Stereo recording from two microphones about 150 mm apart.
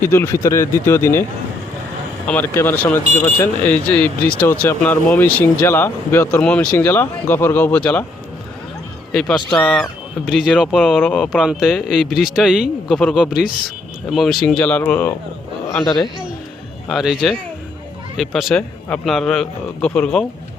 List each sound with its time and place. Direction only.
0.0 s speech: 15° left (ahead or behind)
2.2 s speech: 10° left (ahead or behind)
9.5 s speech: 5° left (ahead or behind)
15.7 s a man's voice: 25° left (ahead or behind)
16.9 s speech: 5° right (ahead or behind)